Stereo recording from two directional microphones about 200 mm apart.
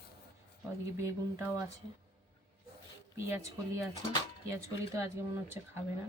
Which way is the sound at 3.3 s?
15° right (ahead or behind).